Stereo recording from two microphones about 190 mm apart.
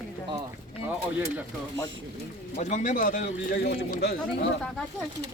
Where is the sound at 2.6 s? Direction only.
40° left (ahead or behind).